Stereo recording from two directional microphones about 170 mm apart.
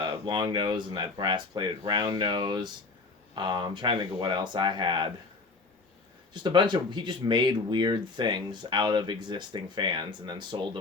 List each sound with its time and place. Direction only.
0.0 s speech: 25° right (ahead or behind)
6.3 s speech: 25° right (ahead or behind)